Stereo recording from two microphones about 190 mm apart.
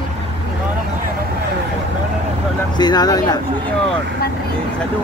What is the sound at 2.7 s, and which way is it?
Speech, 20° left (ahead or behind).